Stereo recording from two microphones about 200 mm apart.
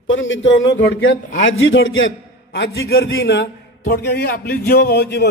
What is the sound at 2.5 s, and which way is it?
A man's voice, 60° left (ahead or behind).